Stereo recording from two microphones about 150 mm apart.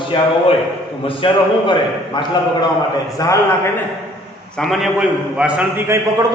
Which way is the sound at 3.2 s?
20° left (ahead or behind).